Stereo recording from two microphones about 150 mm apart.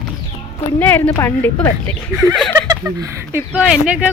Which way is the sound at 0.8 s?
10° left (ahead or behind).